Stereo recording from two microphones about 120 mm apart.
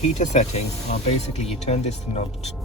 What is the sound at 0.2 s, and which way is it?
Speech, 70° left (ahead or behind).